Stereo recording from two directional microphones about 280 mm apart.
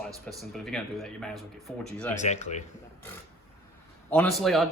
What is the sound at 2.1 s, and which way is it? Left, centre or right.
Speech, left.